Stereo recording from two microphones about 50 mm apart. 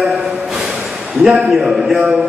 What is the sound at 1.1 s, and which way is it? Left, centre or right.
A man's voice, centre.